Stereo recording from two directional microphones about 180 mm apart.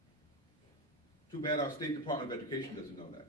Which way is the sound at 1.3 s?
25° left (ahead or behind).